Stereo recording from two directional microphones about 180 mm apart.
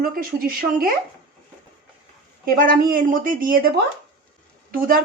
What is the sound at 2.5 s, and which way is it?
A woman's voice, 50° right (ahead or behind).